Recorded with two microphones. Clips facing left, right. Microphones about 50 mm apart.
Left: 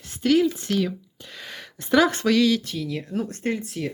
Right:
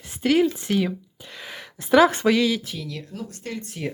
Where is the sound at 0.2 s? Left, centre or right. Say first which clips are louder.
Even; centre.